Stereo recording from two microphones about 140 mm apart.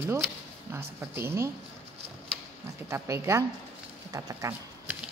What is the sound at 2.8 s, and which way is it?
Speech, 20° right (ahead or behind).